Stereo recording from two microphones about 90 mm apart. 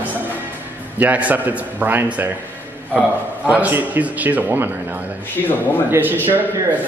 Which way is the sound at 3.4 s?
20° right (ahead or behind).